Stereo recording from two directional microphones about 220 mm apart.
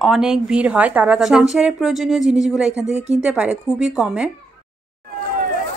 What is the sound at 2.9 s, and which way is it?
Speech, 30° right (ahead or behind).